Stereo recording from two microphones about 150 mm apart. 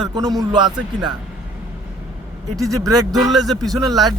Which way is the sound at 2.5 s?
20° right (ahead or behind).